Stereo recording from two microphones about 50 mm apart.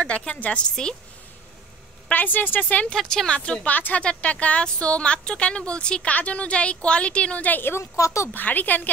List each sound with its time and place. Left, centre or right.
0.0 s speech: left
0.7 s speech: centre
2.1 s a woman's voice: left
2.9 s speech: centre
3.6 s a woman's voice: left
7.8 s speech: left
8.3 s a woman's voice: left